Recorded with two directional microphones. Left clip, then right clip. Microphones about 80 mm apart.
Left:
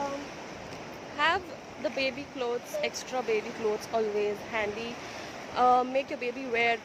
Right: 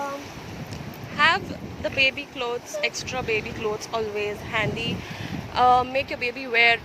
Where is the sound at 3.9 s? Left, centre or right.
Left.